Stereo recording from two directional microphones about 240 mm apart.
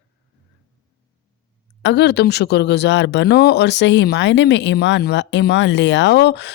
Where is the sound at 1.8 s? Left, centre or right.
Left.